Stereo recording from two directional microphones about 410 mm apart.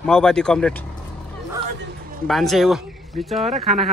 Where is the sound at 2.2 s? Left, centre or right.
Centre.